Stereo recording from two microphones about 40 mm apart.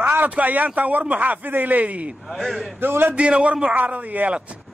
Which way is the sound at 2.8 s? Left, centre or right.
Right.